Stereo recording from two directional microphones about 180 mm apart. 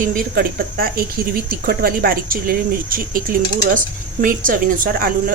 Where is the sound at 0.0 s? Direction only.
50° right (ahead or behind).